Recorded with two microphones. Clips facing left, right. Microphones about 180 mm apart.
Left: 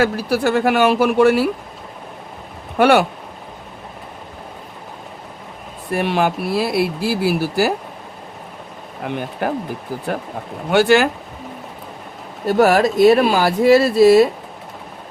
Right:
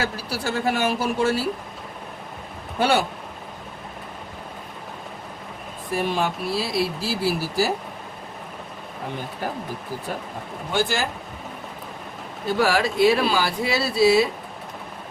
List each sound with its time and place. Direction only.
0.0 s speech: 60° left (ahead or behind)
2.7 s speech: 65° left (ahead or behind)
5.9 s speech: 65° left (ahead or behind)
9.0 s speech: 70° left (ahead or behind)
10.7 s speech: 70° left (ahead or behind)
12.5 s speech: 55° left (ahead or behind)